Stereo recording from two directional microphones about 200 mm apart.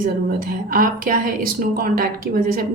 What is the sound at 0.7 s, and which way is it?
A woman's voice, 45° right (ahead or behind).